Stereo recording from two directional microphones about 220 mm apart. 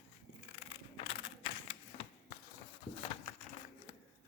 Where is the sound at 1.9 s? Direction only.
35° left (ahead or behind).